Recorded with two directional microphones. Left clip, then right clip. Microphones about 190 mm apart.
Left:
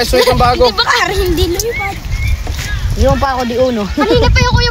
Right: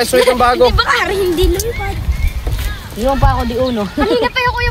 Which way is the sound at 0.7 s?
60° left (ahead or behind).